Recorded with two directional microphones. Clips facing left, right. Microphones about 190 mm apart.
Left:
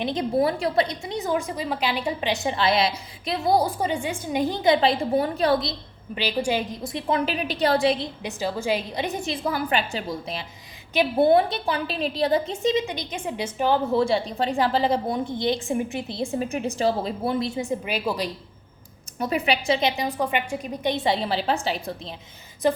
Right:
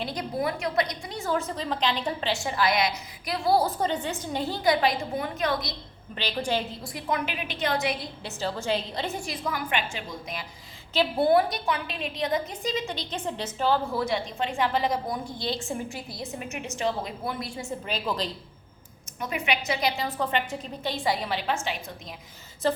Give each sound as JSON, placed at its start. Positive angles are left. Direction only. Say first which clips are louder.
{"t": 0.0, "sound": "a woman's voice", "louder": "left 7 dB", "side_deg": 25}
{"t": 6.1, "sound": "a woman's voice", "louder": "left 4 dB", "side_deg": 10}
{"t": 10.9, "sound": "a woman's voice", "louder": "left 3 dB", "side_deg": 20}
{"t": 13.9, "sound": "a woman's voice", "louder": "left 6 dB", "side_deg": 30}
{"t": 19.2, "sound": "a woman's voice", "louder": "left 5 dB", "side_deg": 35}
{"t": 22.6, "sound": "speech", "louder": "left 4 dB", "side_deg": 15}